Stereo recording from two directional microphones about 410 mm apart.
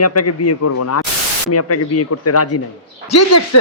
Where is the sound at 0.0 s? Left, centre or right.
Left.